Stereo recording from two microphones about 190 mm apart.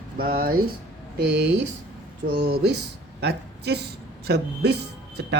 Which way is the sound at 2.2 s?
60° right (ahead or behind).